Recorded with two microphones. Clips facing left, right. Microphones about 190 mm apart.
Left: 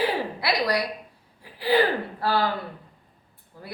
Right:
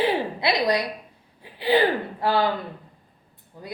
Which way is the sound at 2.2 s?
20° right (ahead or behind).